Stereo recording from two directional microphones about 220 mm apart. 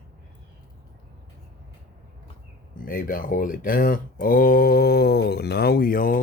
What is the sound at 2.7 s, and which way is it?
Speech, 40° left (ahead or behind).